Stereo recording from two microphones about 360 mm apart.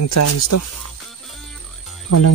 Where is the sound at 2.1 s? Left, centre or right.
Left.